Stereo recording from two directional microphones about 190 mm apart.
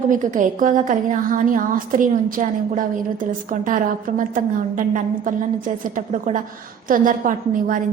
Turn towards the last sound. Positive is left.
turn(degrees=-45)  # may be behind; listen again after turning